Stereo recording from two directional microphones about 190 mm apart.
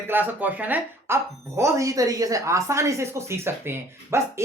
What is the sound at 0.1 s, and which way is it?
Speech, 10° right (ahead or behind).